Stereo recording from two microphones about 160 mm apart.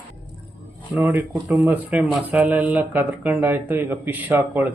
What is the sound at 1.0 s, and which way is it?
Speech, 10° right (ahead or behind).